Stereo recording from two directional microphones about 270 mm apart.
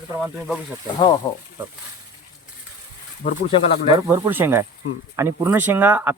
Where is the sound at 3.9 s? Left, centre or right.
Centre.